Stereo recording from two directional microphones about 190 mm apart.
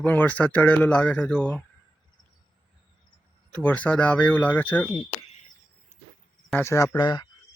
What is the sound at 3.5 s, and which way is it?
Speech, 5° left (ahead or behind).